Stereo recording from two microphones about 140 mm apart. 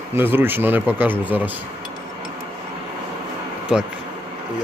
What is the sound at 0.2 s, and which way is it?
Speech, 15° right (ahead or behind).